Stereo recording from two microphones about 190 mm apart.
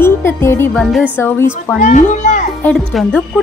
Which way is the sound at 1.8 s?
40° left (ahead or behind).